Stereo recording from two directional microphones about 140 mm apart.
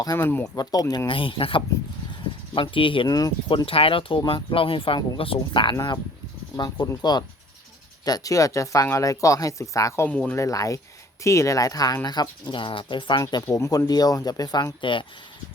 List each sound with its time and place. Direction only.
0.0 s speech: 25° left (ahead or behind)
0.3 s speech: 15° left (ahead or behind)
0.5 s speech: 25° left (ahead or behind)
3.7 s speech: 40° left (ahead or behind); by 10.1 s 20° left (ahead or behind)
10.1 s speech: 10° left (ahead or behind)
10.3 s speech: 25° left (ahead or behind)
13.2 s speech: 25° left (ahead or behind)